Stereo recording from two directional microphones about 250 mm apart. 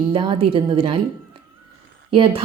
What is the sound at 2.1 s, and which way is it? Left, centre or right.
Speech, right.